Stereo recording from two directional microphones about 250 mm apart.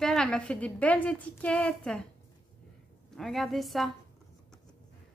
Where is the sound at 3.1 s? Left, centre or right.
Centre.